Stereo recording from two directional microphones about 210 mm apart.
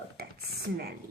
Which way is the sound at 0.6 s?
50° right (ahead or behind).